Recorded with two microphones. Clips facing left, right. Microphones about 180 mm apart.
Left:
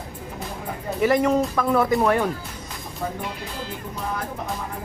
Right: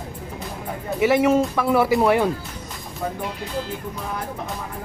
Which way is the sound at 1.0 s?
5° right (ahead or behind).